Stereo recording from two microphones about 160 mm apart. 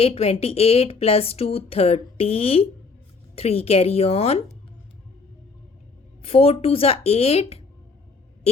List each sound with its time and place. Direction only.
0.0 s a woman's voice: 40° left (ahead or behind)
6.2 s a woman's voice: 40° left (ahead or behind)